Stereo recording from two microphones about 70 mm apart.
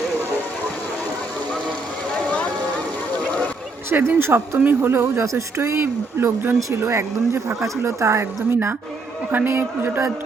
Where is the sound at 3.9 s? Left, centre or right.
Right.